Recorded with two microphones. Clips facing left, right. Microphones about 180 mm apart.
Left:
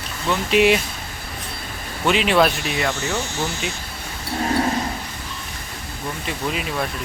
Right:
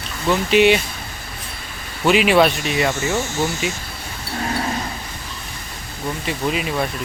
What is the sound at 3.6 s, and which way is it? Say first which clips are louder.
Speech: right 4 dB; 5° right (ahead or behind).